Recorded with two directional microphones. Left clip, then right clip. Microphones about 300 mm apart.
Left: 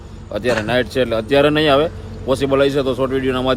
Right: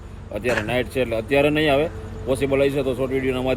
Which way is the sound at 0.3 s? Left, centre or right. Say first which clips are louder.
Left 5 dB; centre.